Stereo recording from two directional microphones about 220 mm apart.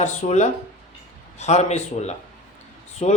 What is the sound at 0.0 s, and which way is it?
Speech, 30° left (ahead or behind).